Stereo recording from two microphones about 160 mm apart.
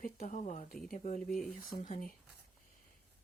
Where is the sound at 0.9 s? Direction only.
50° left (ahead or behind).